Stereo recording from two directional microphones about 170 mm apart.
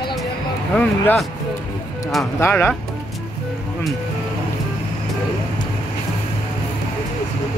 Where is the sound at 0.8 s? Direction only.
10° left (ahead or behind).